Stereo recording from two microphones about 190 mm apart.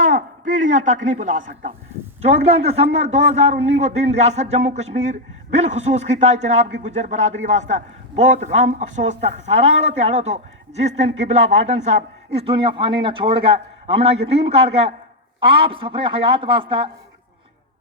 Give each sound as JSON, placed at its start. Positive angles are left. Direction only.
{"t": 0.0, "sound": "a man's voice", "side_deg": -40}